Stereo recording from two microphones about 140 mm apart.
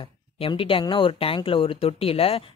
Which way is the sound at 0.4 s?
40° left (ahead or behind).